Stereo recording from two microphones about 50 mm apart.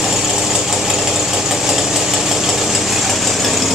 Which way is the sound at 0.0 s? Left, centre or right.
Centre.